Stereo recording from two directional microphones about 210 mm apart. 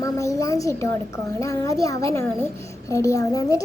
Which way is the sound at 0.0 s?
15° left (ahead or behind).